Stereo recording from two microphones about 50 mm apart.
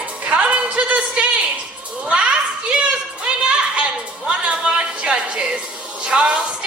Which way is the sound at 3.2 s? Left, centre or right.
Centre.